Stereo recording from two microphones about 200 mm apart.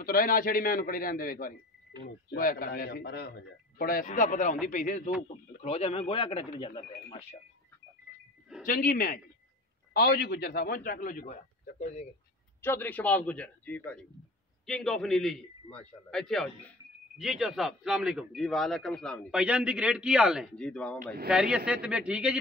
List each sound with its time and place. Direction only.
0.0 s a man's voice: 45° left (ahead or behind); by 7.3 s 30° left (ahead or behind)
8.6 s a man's voice: 45° left (ahead or behind)
12.6 s a man's voice: 10° left (ahead or behind)